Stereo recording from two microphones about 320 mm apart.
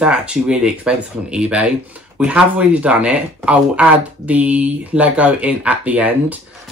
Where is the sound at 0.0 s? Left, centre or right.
Centre.